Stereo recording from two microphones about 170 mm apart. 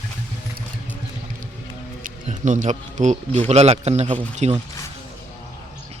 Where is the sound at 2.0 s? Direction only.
50° right (ahead or behind).